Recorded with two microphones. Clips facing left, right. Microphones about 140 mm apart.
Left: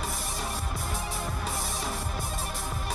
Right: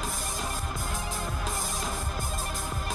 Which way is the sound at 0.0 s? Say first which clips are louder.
Even; centre (ahead or behind).